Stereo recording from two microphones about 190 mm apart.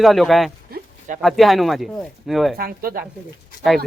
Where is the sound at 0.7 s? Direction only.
45° right (ahead or behind).